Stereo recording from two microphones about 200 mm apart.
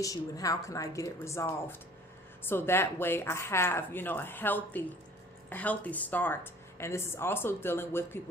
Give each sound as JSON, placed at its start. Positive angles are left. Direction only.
{"t": 0.0, "sound": "a woman's voice", "side_deg": 15}